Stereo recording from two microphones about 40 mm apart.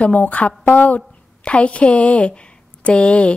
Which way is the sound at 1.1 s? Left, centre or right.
Left.